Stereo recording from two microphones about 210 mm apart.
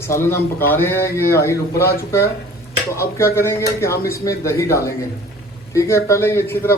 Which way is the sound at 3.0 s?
10° left (ahead or behind).